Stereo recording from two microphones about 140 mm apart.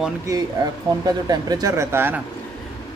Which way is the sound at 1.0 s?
30° right (ahead or behind).